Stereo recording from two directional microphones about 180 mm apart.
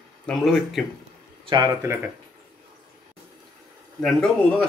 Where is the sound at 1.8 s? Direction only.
10° right (ahead or behind).